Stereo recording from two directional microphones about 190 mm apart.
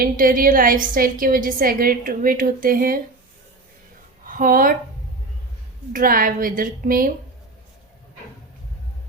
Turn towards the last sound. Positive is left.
turn(degrees=-45)  # may be behind; listen again after turning